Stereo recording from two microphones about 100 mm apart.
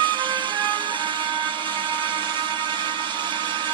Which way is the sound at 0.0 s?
55° right (ahead or behind).